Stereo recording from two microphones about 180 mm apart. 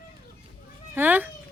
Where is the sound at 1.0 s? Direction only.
10° right (ahead or behind).